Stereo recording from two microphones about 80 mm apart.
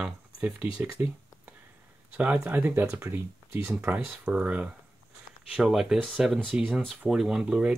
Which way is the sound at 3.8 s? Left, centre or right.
Centre.